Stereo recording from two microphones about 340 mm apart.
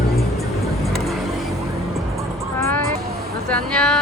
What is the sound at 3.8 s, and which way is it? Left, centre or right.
Music, centre.